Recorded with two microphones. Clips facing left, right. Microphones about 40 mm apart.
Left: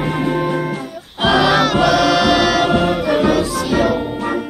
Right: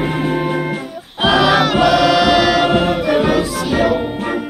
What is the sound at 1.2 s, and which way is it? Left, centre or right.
Music, centre.